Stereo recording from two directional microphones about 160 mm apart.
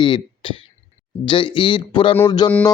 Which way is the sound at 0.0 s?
30° left (ahead or behind).